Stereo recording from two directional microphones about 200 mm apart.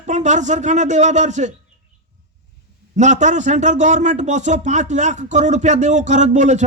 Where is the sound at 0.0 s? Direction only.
35° right (ahead or behind).